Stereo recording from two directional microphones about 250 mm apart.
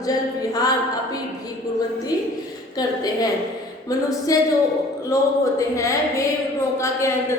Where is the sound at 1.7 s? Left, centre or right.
Centre.